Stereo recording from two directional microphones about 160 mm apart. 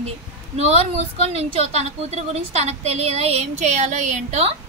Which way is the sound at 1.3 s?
40° right (ahead or behind).